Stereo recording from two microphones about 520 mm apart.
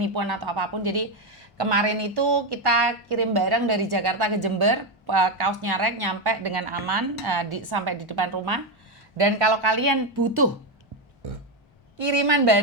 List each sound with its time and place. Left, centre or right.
0.0 s a woman's voice: right
6.7 s a woman's voice: right
6.9 s a woman's voice: right
9.1 s a woman's voice: right
11.9 s a woman's voice: right